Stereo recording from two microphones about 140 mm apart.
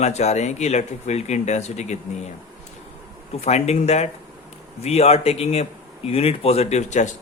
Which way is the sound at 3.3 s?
50° left (ahead or behind).